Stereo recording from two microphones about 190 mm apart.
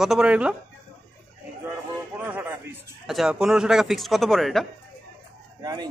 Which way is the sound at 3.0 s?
Centre (ahead or behind).